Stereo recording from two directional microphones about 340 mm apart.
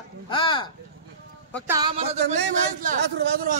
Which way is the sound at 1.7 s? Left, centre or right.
Centre.